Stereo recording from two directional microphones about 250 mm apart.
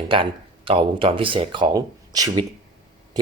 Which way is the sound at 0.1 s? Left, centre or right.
Right.